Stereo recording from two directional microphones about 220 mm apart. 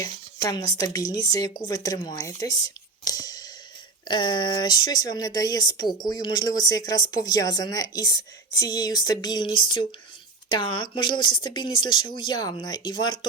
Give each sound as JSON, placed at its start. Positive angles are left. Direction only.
{"t": 0.0, "sound": "speech", "side_deg": 15}
{"t": 2.6, "sound": "whispering", "side_deg": 15}
{"t": 4.1, "sound": "speech", "side_deg": 20}